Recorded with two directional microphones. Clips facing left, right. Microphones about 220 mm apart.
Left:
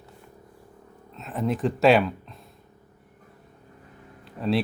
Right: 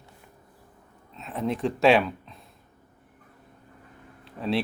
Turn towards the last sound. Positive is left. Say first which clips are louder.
# left 3 dB
turn(degrees=0)  # may be behind; listen again after turning